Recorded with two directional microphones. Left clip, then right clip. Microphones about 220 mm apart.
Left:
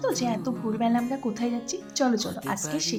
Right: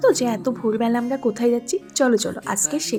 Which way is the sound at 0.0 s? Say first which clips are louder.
Right 9 dB; 40° right (ahead or behind).